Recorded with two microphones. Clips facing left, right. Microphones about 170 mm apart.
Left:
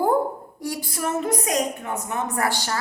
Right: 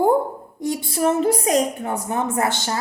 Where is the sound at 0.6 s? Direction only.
25° right (ahead or behind).